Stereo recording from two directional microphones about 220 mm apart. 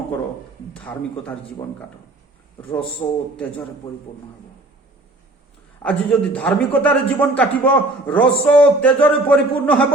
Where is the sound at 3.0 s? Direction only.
20° left (ahead or behind).